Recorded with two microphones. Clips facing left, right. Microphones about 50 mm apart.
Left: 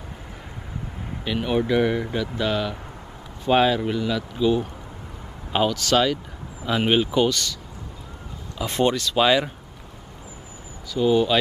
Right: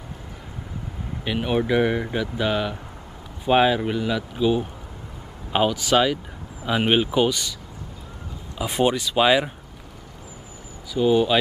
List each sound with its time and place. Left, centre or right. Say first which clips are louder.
1.2 s speech: even; centre
8.5 s speech: even; centre
10.9 s speech: right 1 dB; centre